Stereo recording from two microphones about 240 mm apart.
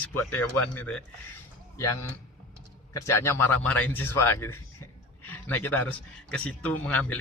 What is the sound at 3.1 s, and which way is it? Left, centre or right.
Speech, centre.